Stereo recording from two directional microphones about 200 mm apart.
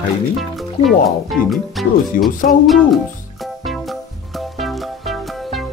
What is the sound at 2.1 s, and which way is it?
Speech, 45° left (ahead or behind).